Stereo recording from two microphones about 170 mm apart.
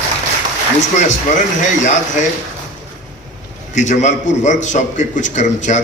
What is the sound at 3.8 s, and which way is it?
A man's voice, 45° left (ahead or behind).